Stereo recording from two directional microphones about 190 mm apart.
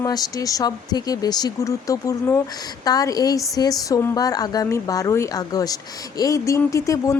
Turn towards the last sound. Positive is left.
turn(degrees=15)  # may be behind; listen again after turning